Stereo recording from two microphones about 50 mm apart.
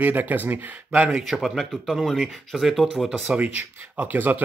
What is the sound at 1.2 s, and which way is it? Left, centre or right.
Speech, centre.